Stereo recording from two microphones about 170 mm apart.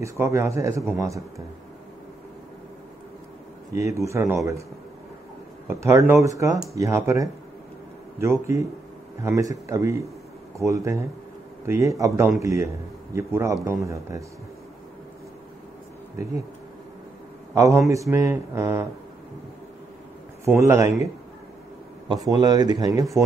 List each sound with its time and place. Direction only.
0.0 s speech: 15° right (ahead or behind)
3.7 s speech: 15° right (ahead or behind)
5.7 s speech: 15° right (ahead or behind)
17.6 s speech: 20° right (ahead or behind)
20.4 s speech: 15° right (ahead or behind)
22.3 s speech: 25° right (ahead or behind)